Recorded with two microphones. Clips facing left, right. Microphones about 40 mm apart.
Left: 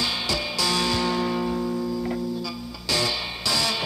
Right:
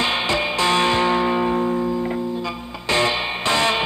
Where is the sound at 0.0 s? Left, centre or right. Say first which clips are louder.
Right 6 dB; right.